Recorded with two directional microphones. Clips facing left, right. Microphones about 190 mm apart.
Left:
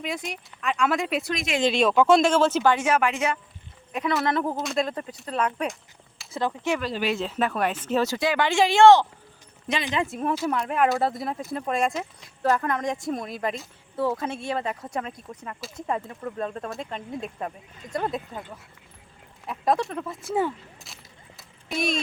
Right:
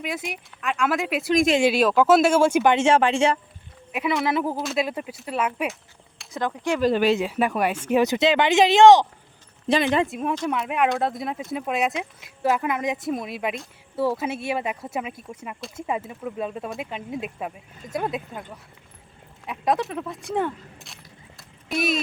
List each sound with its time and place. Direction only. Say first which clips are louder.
0.0 s speech: right 1 dB; 5° right (ahead or behind)
2.7 s speech: right 5 dB; 30° right (ahead or behind)
3.9 s speech: right 1 dB; centre (ahead or behind)
6.8 s speech: right 8 dB; 45° right (ahead or behind)
7.2 s speech: right 3 dB; 10° right (ahead or behind); by 9.8 s 25° right (ahead or behind)
10.1 s speech: even; centre (ahead or behind)
19.5 s speech: even; centre (ahead or behind)